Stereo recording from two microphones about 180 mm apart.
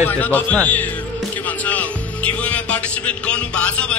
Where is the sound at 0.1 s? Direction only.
10° left (ahead or behind).